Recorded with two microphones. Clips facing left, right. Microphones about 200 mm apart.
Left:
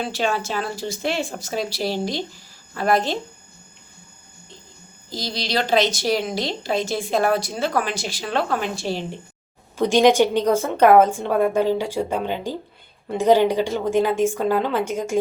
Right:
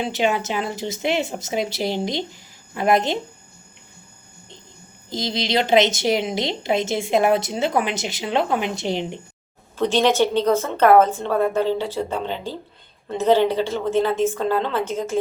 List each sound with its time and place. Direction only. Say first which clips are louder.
0.0 s a woman's voice: right 2 dB; 20° right (ahead or behind)
5.0 s a woman's voice: right 4 dB; 20° right (ahead or behind)
9.7 s a woman's voice: left 3 dB; 10° left (ahead or behind)